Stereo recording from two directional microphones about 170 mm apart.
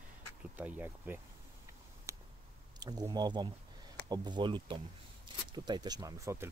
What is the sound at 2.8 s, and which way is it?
Speech, 25° right (ahead or behind).